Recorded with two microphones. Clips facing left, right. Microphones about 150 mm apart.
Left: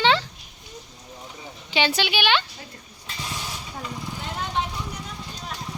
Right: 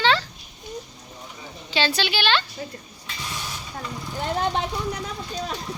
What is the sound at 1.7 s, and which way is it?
Speech, 15° left (ahead or behind).